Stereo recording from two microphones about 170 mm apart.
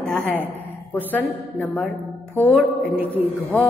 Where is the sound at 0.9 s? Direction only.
10° left (ahead or behind).